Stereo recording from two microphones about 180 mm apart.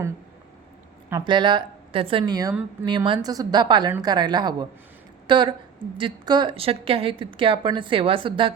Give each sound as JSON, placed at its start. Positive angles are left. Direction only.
{"t": 1.2, "sound": "a woman's voice", "side_deg": -25}